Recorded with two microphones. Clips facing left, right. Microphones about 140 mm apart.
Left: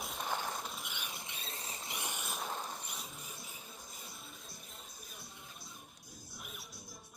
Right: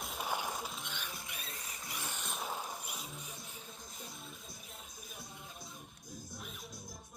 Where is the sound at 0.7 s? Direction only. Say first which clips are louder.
Right 1 dB; 10° left (ahead or behind).